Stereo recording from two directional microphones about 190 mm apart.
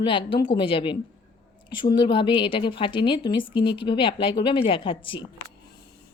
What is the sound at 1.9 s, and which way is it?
A woman's voice, 25° left (ahead or behind).